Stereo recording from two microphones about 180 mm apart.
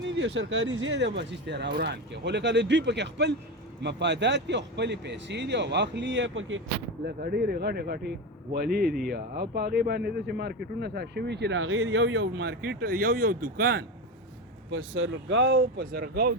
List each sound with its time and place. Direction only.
0.0 s speech: 85° right
7.0 s a man's voice: 60° right (ahead or behind)
14.7 s speech: 90° right; by 16.3 s 55° right (ahead or behind)